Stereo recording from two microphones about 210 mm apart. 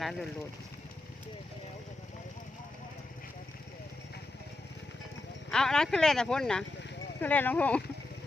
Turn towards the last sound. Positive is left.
turn(degrees=5)  # may be behind; listen again after turning